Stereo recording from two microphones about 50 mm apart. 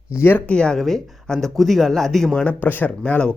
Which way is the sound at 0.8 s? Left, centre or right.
Centre.